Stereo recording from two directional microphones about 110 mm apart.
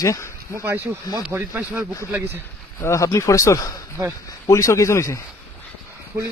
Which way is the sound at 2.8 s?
25° left (ahead or behind).